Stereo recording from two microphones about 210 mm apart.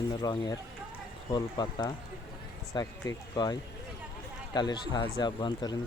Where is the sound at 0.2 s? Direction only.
20° left (ahead or behind).